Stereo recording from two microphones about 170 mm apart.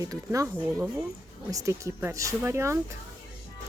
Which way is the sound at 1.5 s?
15° right (ahead or behind).